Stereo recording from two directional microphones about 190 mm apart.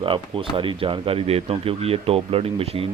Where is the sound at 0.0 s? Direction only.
25° right (ahead or behind).